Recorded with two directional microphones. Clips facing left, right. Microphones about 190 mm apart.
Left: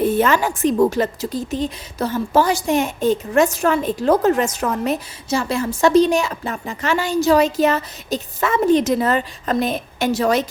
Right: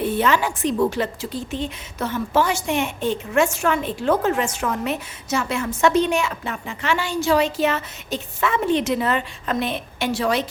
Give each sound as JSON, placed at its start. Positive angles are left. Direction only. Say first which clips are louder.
{"t": 0.0, "sound": "a woman's voice", "louder": "left 3 dB", "side_deg": 45}